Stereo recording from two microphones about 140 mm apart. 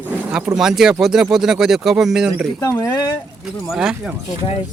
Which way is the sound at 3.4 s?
5° right (ahead or behind).